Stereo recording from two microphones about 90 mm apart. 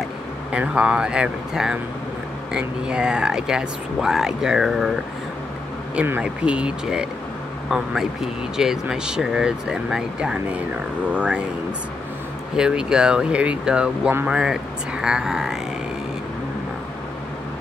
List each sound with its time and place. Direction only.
0.5 s speech: 15° right (ahead or behind)
6.2 s speech: 10° right (ahead or behind)
12.5 s speech: 10° right (ahead or behind)